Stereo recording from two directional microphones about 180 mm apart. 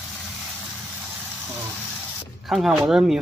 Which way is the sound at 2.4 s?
Centre (ahead or behind).